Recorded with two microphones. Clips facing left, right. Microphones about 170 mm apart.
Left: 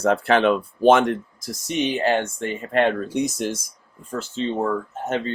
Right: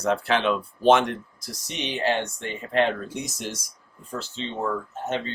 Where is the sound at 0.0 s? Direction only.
50° left (ahead or behind).